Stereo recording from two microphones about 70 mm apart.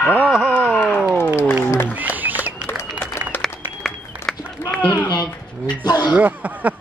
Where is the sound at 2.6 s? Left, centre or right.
Left.